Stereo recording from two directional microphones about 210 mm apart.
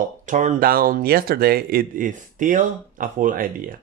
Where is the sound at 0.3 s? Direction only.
35° right (ahead or behind).